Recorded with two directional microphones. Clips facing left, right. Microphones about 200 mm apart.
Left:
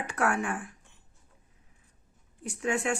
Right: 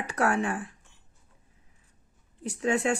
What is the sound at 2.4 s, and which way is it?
Speech, 35° right (ahead or behind).